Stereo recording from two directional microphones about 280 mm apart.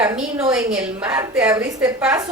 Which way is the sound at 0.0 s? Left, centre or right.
Centre.